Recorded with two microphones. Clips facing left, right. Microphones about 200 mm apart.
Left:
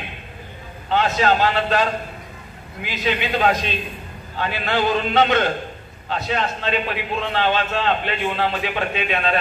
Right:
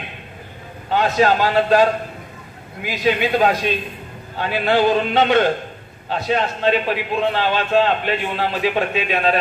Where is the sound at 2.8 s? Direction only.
45° right (ahead or behind).